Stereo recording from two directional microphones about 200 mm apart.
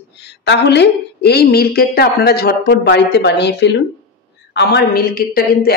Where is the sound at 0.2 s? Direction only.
60° left (ahead or behind).